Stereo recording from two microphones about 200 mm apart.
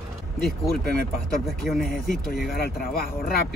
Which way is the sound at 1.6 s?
Centre (ahead or behind).